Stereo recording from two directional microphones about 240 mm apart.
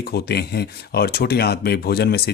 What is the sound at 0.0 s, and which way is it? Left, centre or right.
Speech, left.